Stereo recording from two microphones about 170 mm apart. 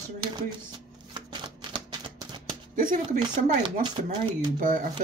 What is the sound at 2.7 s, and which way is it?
Speech, 55° right (ahead or behind).